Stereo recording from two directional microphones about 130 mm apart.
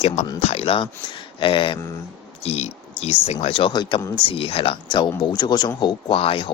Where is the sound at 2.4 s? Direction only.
55° left (ahead or behind).